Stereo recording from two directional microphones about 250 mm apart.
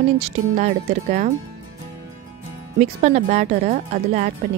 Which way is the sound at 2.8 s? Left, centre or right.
Right.